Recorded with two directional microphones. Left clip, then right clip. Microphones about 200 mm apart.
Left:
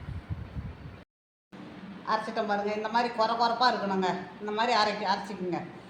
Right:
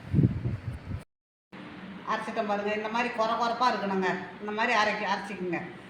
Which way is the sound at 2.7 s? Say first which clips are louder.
Left 1 dB; 5° left (ahead or behind).